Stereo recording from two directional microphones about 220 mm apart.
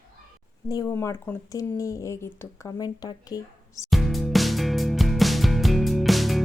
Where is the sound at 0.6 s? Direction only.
15° left (ahead or behind).